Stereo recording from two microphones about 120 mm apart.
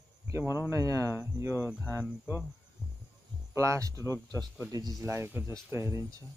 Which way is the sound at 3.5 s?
25° right (ahead or behind).